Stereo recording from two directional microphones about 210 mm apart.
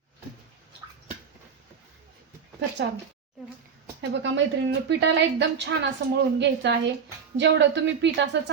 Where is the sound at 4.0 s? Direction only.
60° right (ahead or behind).